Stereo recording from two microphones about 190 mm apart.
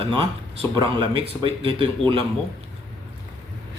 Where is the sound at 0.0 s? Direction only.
30° right (ahead or behind).